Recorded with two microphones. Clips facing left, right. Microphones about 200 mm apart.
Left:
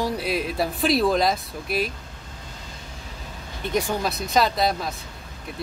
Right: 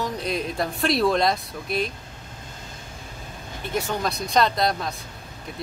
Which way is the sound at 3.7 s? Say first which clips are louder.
Left 2 dB; 15° left (ahead or behind).